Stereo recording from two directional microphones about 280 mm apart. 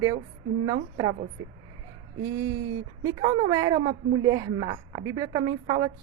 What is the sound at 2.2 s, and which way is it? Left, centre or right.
A woman's voice, centre.